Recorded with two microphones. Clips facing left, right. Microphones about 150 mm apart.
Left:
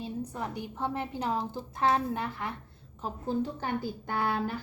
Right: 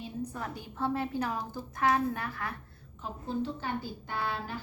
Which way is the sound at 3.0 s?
45° left (ahead or behind).